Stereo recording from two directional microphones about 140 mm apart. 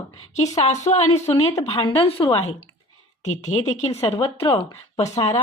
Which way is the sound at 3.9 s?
25° left (ahead or behind).